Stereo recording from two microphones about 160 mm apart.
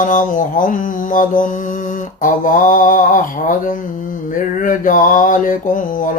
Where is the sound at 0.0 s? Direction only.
55° left (ahead or behind).